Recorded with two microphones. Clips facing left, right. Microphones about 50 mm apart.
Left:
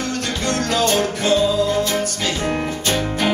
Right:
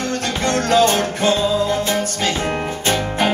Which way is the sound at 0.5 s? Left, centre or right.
Right.